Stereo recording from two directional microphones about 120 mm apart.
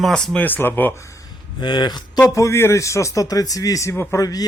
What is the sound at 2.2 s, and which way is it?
A man's voice, 25° left (ahead or behind).